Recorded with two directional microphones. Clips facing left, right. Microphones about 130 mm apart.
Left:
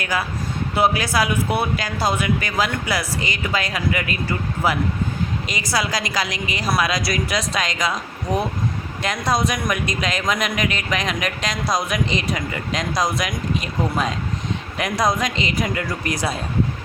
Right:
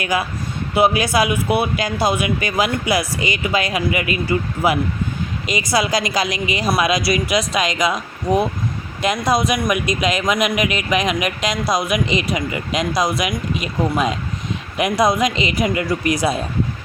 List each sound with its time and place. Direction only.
0.0 s a man's voice: 15° right (ahead or behind)
9.0 s a man's voice: 15° right (ahead or behind)